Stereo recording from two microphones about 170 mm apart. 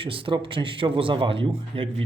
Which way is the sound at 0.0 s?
30° right (ahead or behind).